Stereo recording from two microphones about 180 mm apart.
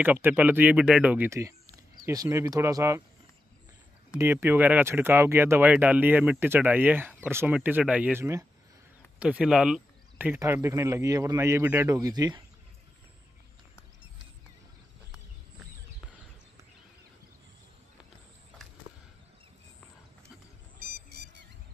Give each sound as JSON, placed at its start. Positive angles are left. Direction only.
{"t": 0.0, "sound": "speech", "side_deg": -10}
{"t": 4.2, "sound": "speech", "side_deg": -15}
{"t": 20.8, "sound": "a sound", "side_deg": -60}